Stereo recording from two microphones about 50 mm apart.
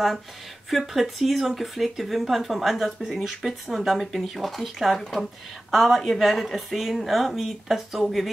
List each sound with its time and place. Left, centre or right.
0.7 s speech: centre